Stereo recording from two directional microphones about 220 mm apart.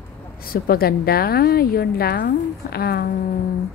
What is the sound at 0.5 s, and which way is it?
A woman's voice, 45° left (ahead or behind).